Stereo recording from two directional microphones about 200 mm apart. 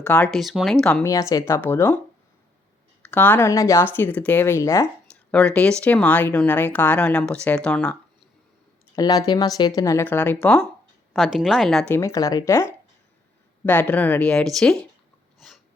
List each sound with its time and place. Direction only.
0.0 s speech: 10° left (ahead or behind)
1.0 s speech: 15° left (ahead or behind)
3.0 s speech: 10° left (ahead or behind)
9.0 s speech: 20° left (ahead or behind); by 11.9 s centre (ahead or behind)
11.9 s speech: 15° left (ahead or behind)
13.7 s speech: 10° left (ahead or behind)
15.4 s snort: centre (ahead or behind)